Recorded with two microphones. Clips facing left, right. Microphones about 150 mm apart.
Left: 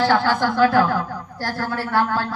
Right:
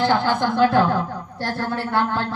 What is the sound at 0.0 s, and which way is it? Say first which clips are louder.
A woman's voice: left 1 dB; 20° right (ahead or behind).